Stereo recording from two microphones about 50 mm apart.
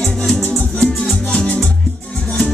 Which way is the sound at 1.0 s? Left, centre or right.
Centre.